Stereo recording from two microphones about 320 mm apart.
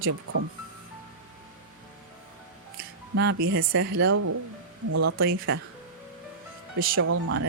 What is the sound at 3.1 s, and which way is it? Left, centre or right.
Speech, right.